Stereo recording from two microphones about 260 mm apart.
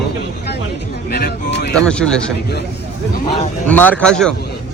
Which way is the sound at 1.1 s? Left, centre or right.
Left.